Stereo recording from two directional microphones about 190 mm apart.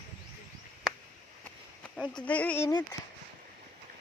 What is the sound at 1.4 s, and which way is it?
Speech, 5° left (ahead or behind).